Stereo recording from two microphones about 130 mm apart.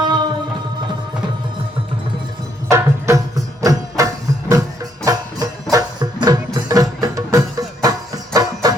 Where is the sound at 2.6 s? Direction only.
20° right (ahead or behind).